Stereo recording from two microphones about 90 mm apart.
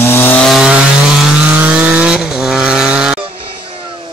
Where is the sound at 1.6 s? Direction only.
15° right (ahead or behind).